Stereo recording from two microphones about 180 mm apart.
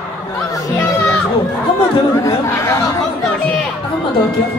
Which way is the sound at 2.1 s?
15° left (ahead or behind).